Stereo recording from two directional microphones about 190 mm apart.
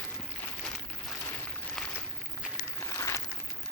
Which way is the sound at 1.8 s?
Centre (ahead or behind).